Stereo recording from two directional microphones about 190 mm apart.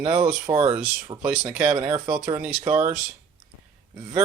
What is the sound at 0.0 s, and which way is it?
Speech, 30° right (ahead or behind).